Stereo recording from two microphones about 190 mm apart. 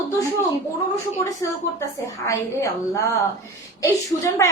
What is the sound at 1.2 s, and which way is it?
A woman's voice, 15° left (ahead or behind).